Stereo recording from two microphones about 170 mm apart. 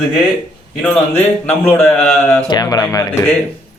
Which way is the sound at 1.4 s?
10° left (ahead or behind).